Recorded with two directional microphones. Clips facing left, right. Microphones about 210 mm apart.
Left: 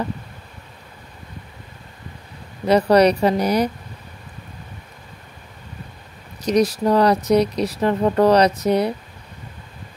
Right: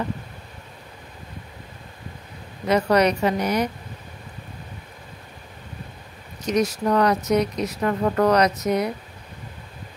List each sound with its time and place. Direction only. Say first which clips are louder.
2.6 s speech: left 4 dB; 35° left (ahead or behind)
6.4 s speech: left 4 dB; 35° left (ahead or behind)